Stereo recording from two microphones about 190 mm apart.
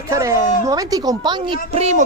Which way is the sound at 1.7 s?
35° right (ahead or behind).